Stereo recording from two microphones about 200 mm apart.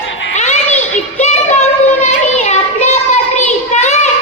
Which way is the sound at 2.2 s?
35° left (ahead or behind).